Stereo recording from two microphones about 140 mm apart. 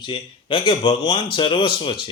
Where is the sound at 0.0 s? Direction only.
35° left (ahead or behind).